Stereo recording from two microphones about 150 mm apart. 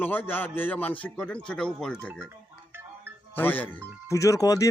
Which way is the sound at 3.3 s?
10° left (ahead or behind).